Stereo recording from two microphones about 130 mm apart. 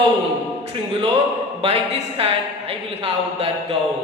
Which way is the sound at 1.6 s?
45° right (ahead or behind).